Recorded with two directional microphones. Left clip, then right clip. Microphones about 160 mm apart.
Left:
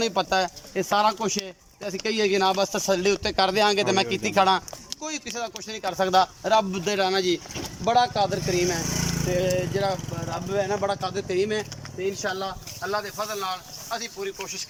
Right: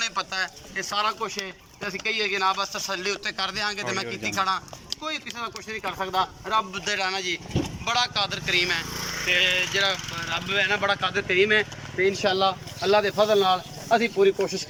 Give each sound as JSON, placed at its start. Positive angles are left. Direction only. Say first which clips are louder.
{"t": 0.0, "sound": "speech", "louder": "left 4 dB", "side_deg": 90}
{"t": 7.9, "sound": "speech", "louder": "left 4 dB", "side_deg": 55}
{"t": 9.2, "sound": "speech", "louder": "right 4 dB", "side_deg": 40}
{"t": 12.2, "sound": "speech", "louder": "right 7 dB", "side_deg": -10}
{"t": 12.8, "sound": "speech", "louder": "right 8 dB", "side_deg": -30}
{"t": 13.9, "sound": "speech", "louder": "right 11 dB", "side_deg": -70}